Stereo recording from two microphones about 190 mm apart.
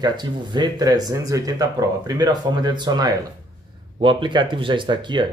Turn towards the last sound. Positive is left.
turn(degrees=-25)  # may be behind; listen again after turning